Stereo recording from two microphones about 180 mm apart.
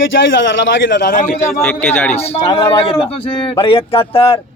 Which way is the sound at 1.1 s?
45° left (ahead or behind).